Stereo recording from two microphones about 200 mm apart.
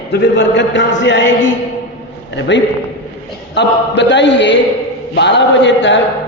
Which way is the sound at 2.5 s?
60° left (ahead or behind).